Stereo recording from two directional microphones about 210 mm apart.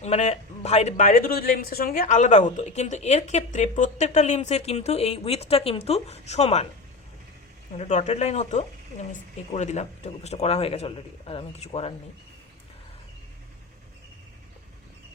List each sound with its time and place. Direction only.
0.0 s speech: 30° left (ahead or behind)
7.8 s a man's voice: 35° left (ahead or behind)